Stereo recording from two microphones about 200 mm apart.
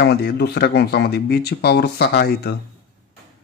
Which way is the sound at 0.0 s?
55° left (ahead or behind).